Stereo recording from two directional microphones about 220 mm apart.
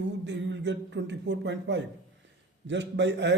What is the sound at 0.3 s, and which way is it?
Speech, 55° right (ahead or behind).